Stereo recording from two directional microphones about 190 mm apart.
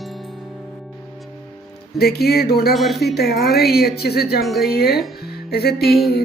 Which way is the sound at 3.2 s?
55° left (ahead or behind).